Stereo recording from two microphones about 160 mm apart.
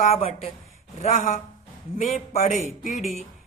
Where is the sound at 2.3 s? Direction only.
45° left (ahead or behind).